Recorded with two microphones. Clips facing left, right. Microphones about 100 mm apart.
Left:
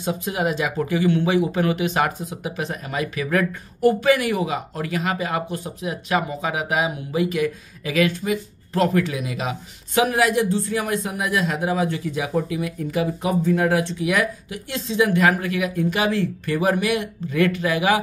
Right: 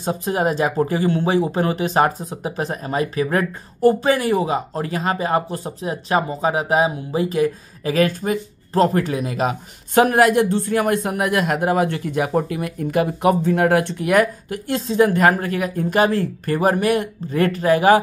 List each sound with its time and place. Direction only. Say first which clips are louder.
0.0 s speech: right 3 dB; 40° right (ahead or behind)